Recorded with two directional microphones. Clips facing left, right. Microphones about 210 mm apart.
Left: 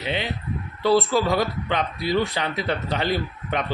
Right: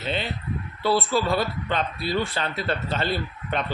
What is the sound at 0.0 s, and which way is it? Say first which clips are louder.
Speech: left 1 dB; 15° left (ahead or behind).